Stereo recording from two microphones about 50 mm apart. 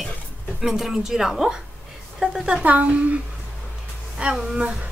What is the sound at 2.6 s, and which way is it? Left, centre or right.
Speech, right.